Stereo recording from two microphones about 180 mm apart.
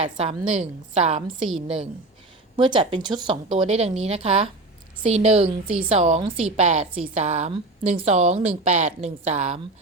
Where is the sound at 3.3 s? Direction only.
35° right (ahead or behind).